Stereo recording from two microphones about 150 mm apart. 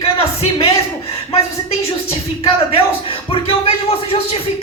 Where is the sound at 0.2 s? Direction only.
40° left (ahead or behind).